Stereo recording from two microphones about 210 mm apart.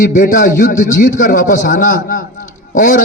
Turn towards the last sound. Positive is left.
turn(degrees=40)  # may be behind; listen again after turning